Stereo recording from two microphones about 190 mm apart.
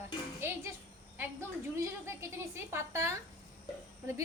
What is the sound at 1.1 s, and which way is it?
A woman's voice, 10° right (ahead or behind).